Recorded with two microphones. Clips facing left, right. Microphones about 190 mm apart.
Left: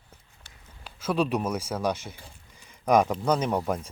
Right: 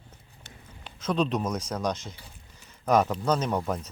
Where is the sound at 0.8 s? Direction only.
5° left (ahead or behind).